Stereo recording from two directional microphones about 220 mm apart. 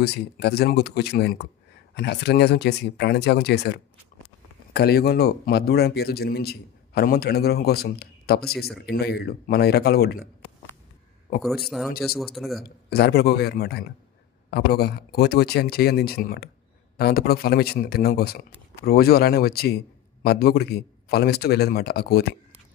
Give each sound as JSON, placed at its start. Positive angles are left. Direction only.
{"t": 0.0, "sound": "speech", "side_deg": 45}
{"t": 11.4, "sound": "speech", "side_deg": 0}
{"t": 12.6, "sound": "speech", "side_deg": 45}